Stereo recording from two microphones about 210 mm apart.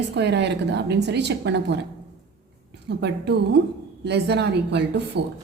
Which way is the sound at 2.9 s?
55° right (ahead or behind).